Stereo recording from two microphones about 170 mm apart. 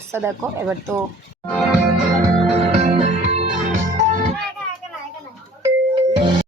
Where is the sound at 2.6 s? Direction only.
35° right (ahead or behind).